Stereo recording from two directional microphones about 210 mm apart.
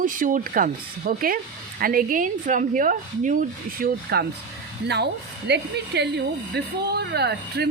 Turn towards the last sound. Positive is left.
turn(degrees=-50)  # may be behind; listen again after turning